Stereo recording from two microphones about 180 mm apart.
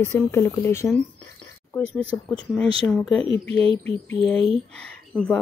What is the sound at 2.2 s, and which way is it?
A woman's voice, 5° left (ahead or behind).